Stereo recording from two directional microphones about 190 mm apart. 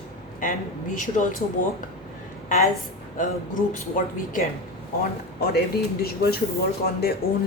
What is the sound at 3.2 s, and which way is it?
Speech, 40° left (ahead or behind).